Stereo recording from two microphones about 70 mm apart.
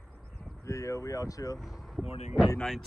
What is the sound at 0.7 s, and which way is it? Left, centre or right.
Speech, left.